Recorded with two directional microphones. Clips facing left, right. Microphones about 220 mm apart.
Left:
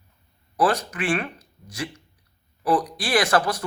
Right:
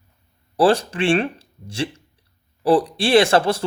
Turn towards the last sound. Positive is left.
turn(degrees=-25)  # may be behind; listen again after turning